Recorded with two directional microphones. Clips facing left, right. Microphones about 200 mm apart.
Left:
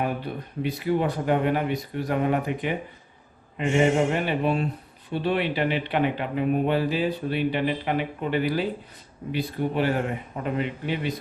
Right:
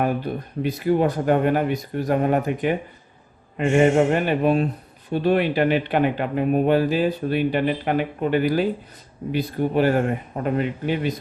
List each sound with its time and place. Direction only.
0.3 s speech: 45° right (ahead or behind)